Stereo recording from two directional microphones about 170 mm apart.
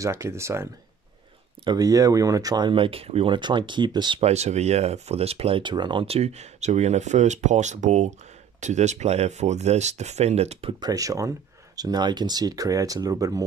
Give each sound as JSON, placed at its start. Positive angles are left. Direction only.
{"t": 0.0, "sound": "speech", "side_deg": -15}
{"t": 4.2, "sound": "speech", "side_deg": -40}
{"t": 10.8, "sound": "speech", "side_deg": -20}